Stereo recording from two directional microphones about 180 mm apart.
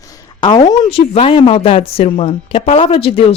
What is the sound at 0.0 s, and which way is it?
Speech, 20° left (ahead or behind).